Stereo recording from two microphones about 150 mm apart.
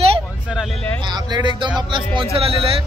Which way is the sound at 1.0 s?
30° right (ahead or behind).